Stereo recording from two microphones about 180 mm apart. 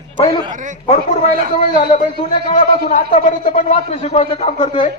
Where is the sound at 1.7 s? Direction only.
45° left (ahead or behind).